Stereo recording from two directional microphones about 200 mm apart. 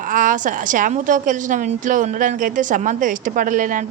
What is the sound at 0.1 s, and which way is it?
A woman's voice, 40° right (ahead or behind).